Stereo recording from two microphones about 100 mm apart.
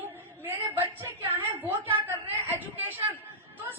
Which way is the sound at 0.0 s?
20° right (ahead or behind).